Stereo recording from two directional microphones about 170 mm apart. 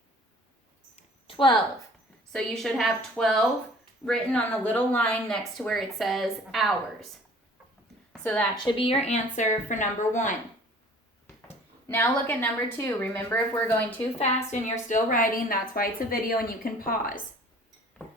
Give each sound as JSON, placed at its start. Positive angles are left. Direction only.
{"t": 0.9, "sound": "a sound", "side_deg": 30}
{"t": 2.3, "sound": "speech", "side_deg": 0}
{"t": 8.1, "sound": "a woman's voice", "side_deg": 10}
{"t": 8.5, "sound": "speech", "side_deg": 30}
{"t": 11.4, "sound": "speech", "side_deg": 10}
{"t": 14.2, "sound": "a woman's voice", "side_deg": 45}